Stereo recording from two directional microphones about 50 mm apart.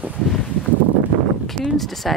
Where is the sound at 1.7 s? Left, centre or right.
Centre.